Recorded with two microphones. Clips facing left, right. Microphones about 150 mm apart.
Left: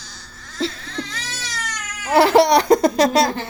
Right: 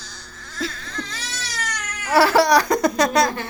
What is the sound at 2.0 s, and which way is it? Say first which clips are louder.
Laughter: left 3 dB; 20° left (ahead or behind).